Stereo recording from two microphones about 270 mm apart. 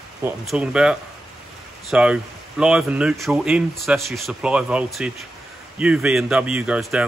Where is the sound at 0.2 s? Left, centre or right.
Centre.